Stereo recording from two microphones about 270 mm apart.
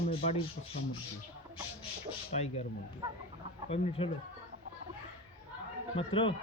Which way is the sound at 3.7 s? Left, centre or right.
Left.